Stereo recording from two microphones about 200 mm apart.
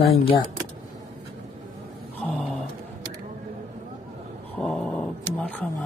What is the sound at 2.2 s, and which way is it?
Vehicle, centre (ahead or behind).